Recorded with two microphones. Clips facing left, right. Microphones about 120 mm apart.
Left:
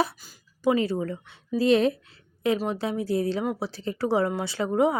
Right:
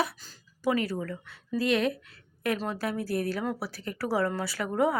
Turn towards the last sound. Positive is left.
turn(degrees=20)  # may be behind; listen again after turning